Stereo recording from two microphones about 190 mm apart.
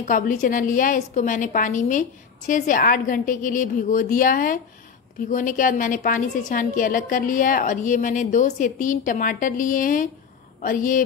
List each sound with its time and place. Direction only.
0.0 s a woman's voice: 45° left (ahead or behind)